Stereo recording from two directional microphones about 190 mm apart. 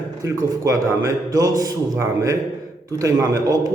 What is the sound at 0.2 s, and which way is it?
A man's voice, 15° right (ahead or behind).